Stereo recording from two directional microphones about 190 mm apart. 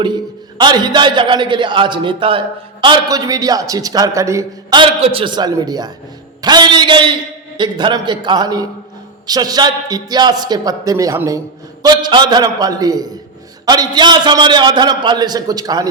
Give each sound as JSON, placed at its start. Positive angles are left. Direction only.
{"t": 0.6, "sound": "a man's voice", "side_deg": -25}